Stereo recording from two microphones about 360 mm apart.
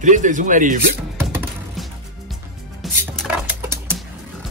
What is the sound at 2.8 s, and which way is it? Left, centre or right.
Music, centre.